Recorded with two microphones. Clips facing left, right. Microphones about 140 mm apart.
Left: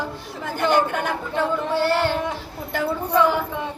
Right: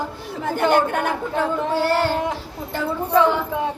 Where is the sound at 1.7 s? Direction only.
40° right (ahead or behind).